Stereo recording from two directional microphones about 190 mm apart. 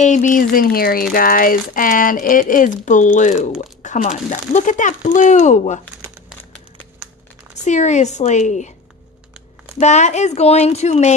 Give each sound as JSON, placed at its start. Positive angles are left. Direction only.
{"t": 0.0, "sound": "speech", "side_deg": 40}
{"t": 7.6, "sound": "speech", "side_deg": 40}
{"t": 9.8, "sound": "speech", "side_deg": 35}